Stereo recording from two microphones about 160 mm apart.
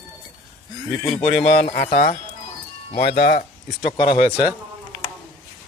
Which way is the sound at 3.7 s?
40° left (ahead or behind).